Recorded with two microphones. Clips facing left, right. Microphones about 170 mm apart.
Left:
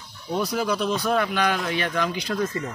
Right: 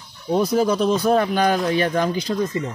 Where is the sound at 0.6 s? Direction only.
40° right (ahead or behind).